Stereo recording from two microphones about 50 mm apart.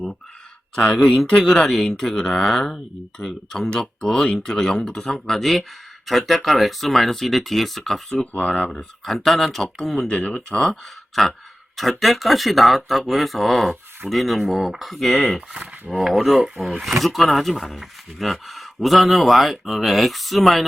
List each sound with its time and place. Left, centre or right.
1.4 s speech: centre
8.3 s speech: left
8.7 s speech: centre
10.1 s speech: left
10.6 s speech: centre